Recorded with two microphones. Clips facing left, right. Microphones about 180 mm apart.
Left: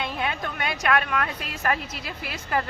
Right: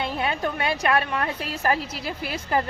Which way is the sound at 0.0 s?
35° right (ahead or behind).